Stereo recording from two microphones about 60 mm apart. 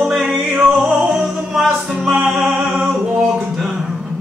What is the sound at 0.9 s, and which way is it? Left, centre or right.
Music, centre.